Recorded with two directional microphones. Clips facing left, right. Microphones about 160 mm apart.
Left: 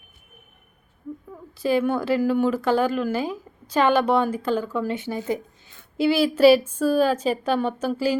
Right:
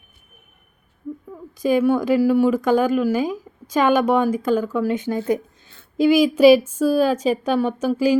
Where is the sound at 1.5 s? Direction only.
15° right (ahead or behind).